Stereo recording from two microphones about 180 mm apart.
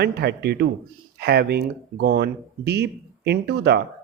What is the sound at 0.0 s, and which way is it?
Speech, 65° right (ahead or behind).